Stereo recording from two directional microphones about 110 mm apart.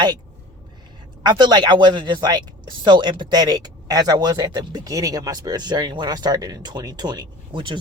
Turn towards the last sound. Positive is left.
turn(degrees=-50)  # may be behind; listen again after turning